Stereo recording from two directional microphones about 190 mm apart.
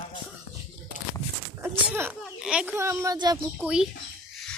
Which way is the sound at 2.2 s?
5° right (ahead or behind).